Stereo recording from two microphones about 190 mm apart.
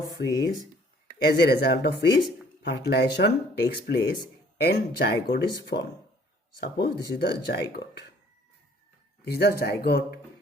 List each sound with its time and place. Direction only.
0.2 s speech: 60° left (ahead or behind)
9.2 s speech: 55° left (ahead or behind)